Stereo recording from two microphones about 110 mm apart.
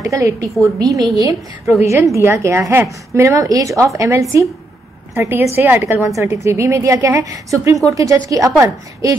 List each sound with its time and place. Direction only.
0.0 s a woman's voice: 30° right (ahead or behind)